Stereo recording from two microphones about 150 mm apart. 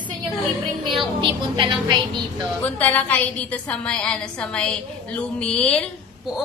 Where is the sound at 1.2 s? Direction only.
30° right (ahead or behind).